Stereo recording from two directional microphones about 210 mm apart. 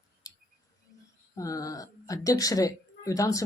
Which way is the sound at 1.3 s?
15° left (ahead or behind).